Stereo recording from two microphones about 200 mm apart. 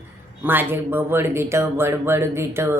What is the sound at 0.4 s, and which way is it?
Speech, 10° right (ahead or behind).